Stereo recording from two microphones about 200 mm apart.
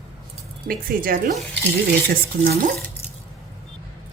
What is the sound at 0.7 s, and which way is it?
Speech, 45° right (ahead or behind).